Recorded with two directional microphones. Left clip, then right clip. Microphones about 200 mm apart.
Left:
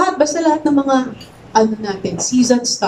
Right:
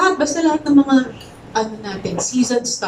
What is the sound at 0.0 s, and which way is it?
A woman's voice, 35° left (ahead or behind).